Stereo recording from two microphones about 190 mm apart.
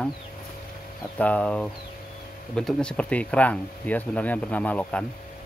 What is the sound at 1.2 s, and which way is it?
Speech, 5° left (ahead or behind).